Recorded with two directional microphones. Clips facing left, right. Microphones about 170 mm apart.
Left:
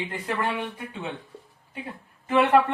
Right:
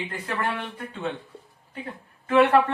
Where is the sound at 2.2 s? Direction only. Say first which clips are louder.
Right 1 dB; 15° left (ahead or behind).